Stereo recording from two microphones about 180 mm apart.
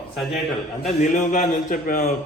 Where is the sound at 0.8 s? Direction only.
45° left (ahead or behind).